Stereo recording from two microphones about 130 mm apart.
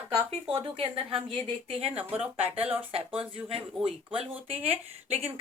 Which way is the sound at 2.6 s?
15° right (ahead or behind).